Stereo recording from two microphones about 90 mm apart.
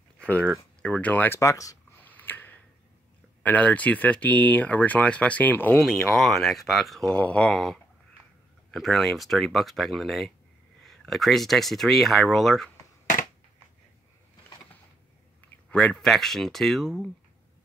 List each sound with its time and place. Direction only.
0.2 s a sound: 10° left (ahead or behind)
0.8 s speech: 15° left (ahead or behind)
1.4 s speech: 40° left (ahead or behind)
1.9 s a sound: 20° left (ahead or behind)
3.4 s speech: 15° left (ahead or behind)
5.8 s speech: centre (ahead or behind)
7.1 s speech: 15° left (ahead or behind)
15.7 s speech: 10° left (ahead or behind)